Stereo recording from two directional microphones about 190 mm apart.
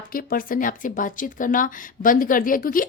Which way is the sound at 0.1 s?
50° left (ahead or behind).